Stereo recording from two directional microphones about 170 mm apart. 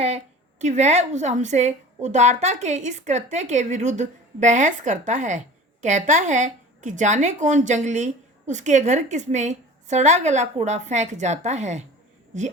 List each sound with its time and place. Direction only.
0.6 s a woman's voice: 40° right (ahead or behind)